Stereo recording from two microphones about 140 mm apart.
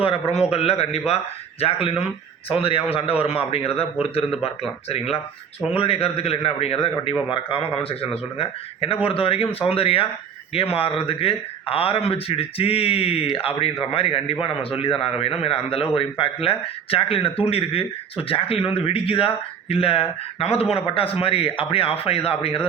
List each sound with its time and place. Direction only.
0.0 s a man's voice: 45° left (ahead or behind)
4.3 s speech: centre (ahead or behind)
5.7 s a man's voice: 45° left (ahead or behind)